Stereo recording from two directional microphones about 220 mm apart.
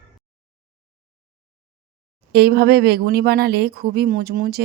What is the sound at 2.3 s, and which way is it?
Speech, 50° right (ahead or behind).